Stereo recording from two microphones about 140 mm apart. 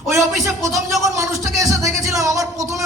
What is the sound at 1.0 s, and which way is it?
Speech, 20° right (ahead or behind).